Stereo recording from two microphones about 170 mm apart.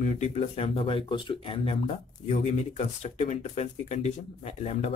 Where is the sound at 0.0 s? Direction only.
40° left (ahead or behind).